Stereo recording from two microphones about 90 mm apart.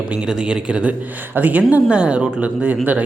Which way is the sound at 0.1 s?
10° right (ahead or behind).